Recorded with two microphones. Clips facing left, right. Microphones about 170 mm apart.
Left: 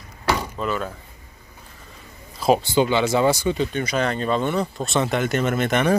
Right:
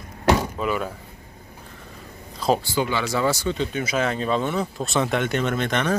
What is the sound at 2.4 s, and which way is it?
A man's voice, 20° left (ahead or behind).